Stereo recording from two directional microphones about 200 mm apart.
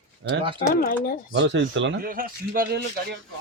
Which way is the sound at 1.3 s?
65° right (ahead or behind).